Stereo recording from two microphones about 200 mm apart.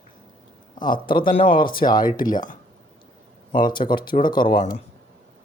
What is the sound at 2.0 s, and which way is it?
Speech, 45° left (ahead or behind).